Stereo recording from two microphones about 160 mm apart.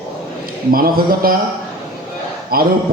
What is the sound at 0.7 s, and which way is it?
Speech, 65° right (ahead or behind).